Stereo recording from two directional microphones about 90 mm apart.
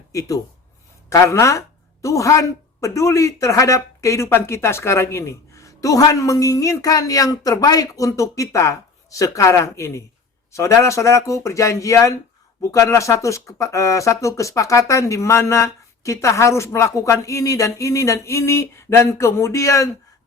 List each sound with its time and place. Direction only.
0.1 s a woman's voice: 40° left (ahead or behind)